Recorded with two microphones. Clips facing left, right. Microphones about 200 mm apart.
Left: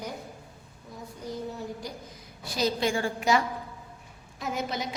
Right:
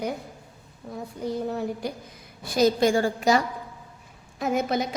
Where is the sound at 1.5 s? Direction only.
60° right (ahead or behind).